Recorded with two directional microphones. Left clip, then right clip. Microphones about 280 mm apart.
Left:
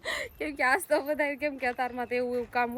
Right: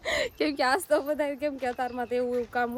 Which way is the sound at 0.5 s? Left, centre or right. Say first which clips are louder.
Left 1 dB; centre.